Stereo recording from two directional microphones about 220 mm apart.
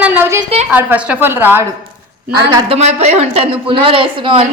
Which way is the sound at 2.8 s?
30° right (ahead or behind).